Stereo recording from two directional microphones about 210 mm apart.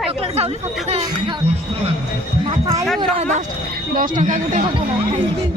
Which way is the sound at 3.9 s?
40° right (ahead or behind).